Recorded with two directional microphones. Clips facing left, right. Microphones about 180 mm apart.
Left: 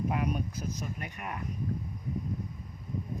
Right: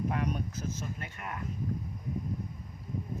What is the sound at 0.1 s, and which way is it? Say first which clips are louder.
Speech: left 1 dB; 10° left (ahead or behind).